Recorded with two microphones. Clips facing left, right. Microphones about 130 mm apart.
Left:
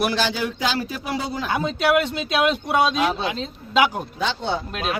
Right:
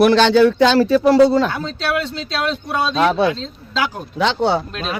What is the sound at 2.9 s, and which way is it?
Speech, 65° right (ahead or behind).